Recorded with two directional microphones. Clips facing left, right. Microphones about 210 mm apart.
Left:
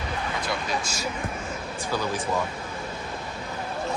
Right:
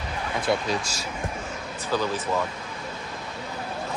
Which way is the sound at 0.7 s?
35° right (ahead or behind).